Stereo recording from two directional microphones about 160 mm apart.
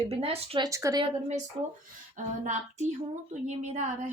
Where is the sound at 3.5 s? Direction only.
45° right (ahead or behind).